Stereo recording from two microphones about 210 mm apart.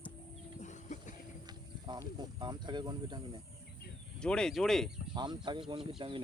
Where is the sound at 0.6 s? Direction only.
35° left (ahead or behind).